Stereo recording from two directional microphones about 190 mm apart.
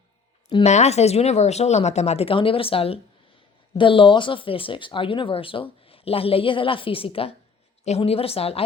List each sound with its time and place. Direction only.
0.4 s speech: 35° left (ahead or behind)